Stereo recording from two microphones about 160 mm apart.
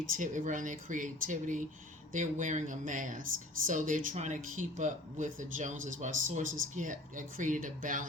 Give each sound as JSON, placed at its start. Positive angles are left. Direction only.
{"t": 0.2, "sound": "speech", "side_deg": -55}